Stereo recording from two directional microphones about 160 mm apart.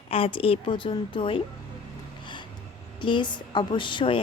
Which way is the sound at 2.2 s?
30° left (ahead or behind).